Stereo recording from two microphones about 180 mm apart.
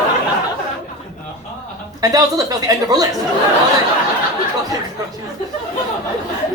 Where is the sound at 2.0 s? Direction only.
20° right (ahead or behind).